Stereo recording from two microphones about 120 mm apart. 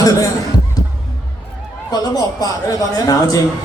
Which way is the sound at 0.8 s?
30° left (ahead or behind).